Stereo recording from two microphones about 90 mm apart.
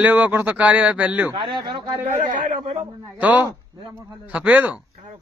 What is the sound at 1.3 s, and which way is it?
Speech, 60° right (ahead or behind).